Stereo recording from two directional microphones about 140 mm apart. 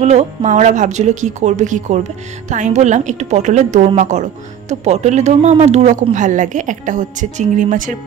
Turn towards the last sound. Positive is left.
turn(degrees=-70)  # may be behind; listen again after turning